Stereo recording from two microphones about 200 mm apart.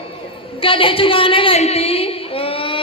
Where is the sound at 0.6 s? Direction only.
25° left (ahead or behind).